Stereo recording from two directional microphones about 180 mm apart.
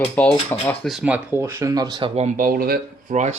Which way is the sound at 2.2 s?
45° right (ahead or behind).